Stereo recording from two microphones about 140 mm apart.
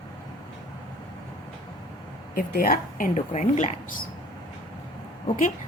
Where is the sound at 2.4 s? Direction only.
85° left; by 3.6 s 60° left (ahead or behind).